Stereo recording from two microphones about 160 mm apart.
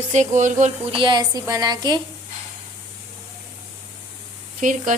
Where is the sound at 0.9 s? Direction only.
30° right (ahead or behind).